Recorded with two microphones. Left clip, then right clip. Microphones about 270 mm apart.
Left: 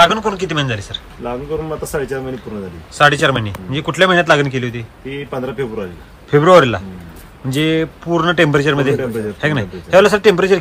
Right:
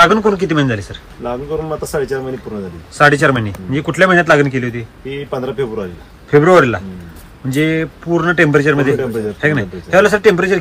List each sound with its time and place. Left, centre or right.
0.0 s a man's voice: centre
1.2 s speech: centre
3.0 s a man's voice: centre
5.0 s speech: centre
6.3 s a man's voice: centre